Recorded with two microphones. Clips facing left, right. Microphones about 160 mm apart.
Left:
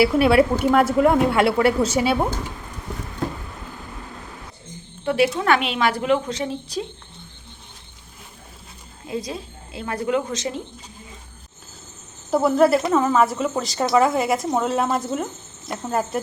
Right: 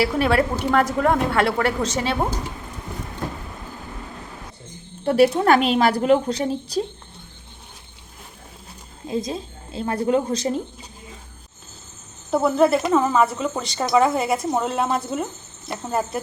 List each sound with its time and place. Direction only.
0.0 s a woman's voice: 10° left (ahead or behind)
5.0 s a woman's voice: 40° right (ahead or behind)
9.0 s a woman's voice: 25° right (ahead or behind)
12.3 s speech: centre (ahead or behind)